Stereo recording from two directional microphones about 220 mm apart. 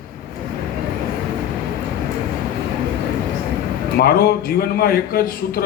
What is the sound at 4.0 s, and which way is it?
A man's voice, 45° left (ahead or behind).